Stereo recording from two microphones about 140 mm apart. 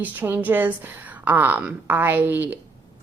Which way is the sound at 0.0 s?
10° right (ahead or behind).